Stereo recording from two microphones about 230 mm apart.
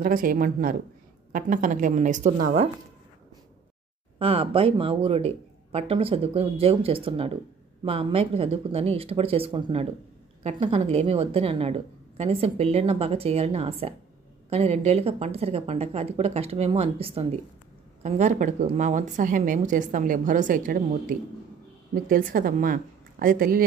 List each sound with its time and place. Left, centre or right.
0.0 s a woman's voice: right
4.2 s a woman's voice: right